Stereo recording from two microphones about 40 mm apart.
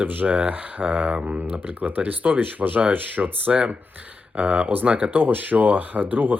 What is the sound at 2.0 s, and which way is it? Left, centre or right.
Speech, right.